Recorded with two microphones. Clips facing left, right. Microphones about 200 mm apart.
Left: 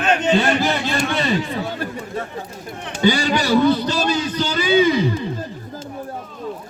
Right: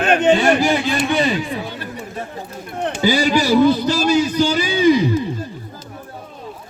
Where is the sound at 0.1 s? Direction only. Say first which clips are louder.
Right 4 dB; 55° right (ahead or behind).